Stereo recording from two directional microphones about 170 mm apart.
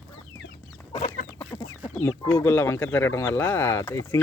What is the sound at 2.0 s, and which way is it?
Speech, 10° left (ahead or behind).